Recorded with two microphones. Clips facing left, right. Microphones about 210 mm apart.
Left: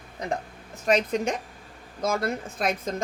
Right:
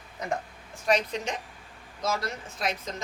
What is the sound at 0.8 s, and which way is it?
A woman's voice, 45° left (ahead or behind).